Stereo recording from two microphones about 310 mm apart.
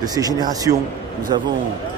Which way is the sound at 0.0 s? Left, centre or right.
Centre.